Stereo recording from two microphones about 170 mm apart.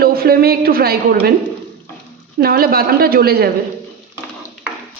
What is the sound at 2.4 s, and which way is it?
A man's voice, 65° right (ahead or behind).